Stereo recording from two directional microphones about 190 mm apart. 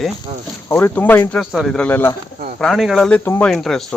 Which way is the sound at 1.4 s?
Centre (ahead or behind).